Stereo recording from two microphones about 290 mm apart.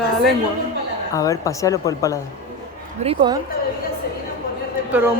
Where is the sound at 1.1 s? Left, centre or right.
Centre.